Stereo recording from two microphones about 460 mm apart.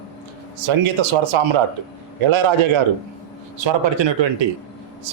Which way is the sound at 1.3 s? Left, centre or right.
Right.